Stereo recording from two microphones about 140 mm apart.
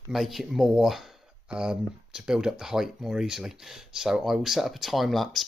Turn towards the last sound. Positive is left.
turn(degrees=0)  # may be behind; listen again after turning